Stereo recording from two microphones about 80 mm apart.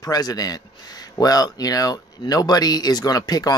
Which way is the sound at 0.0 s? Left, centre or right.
Left.